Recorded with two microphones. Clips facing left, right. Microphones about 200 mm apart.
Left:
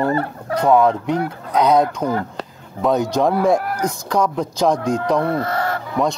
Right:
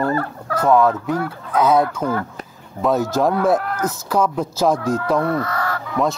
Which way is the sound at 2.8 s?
Centre (ahead or behind).